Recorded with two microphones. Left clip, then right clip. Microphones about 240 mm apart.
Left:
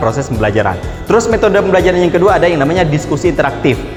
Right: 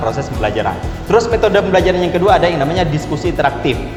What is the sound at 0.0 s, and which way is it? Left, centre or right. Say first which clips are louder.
Speech: left 3 dB; left.